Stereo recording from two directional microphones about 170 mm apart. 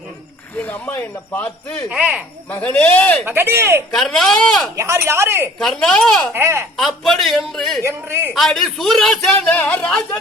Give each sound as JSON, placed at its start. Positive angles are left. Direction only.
{"t": 0.6, "sound": "speech", "side_deg": 10}
{"t": 1.9, "sound": "a man's voice", "side_deg": -5}
{"t": 2.5, "sound": "speech", "side_deg": 10}
{"t": 3.2, "sound": "speech", "side_deg": -15}
{"t": 3.9, "sound": "a man's voice", "side_deg": 5}
{"t": 4.8, "sound": "speech", "side_deg": -15}
{"t": 5.5, "sound": "a man's voice", "side_deg": 5}
{"t": 6.3, "sound": "speech", "side_deg": -15}
{"t": 6.7, "sound": "a man's voice", "side_deg": 0}
{"t": 7.9, "sound": "speech", "side_deg": -15}
{"t": 8.3, "sound": "a man's voice", "side_deg": 0}